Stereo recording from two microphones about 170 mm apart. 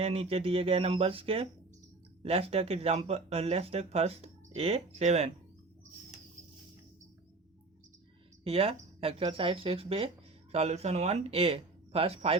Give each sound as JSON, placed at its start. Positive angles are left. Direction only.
{"t": 0.0, "sound": "speech", "side_deg": -35}
{"t": 8.4, "sound": "speech", "side_deg": -35}